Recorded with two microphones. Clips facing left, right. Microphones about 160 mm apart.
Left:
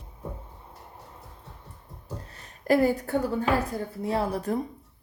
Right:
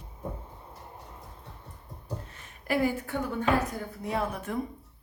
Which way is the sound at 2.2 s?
40° left (ahead or behind).